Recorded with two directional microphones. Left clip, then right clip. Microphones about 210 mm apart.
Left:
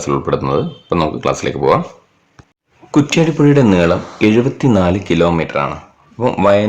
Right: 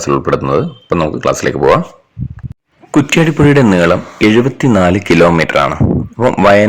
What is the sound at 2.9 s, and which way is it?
A man's voice, 20° right (ahead or behind).